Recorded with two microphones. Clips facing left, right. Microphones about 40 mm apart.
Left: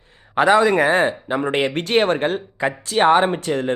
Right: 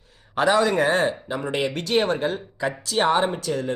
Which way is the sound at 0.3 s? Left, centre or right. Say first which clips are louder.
Left 5 dB; centre.